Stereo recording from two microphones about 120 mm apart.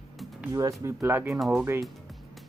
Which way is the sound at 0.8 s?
20° right (ahead or behind).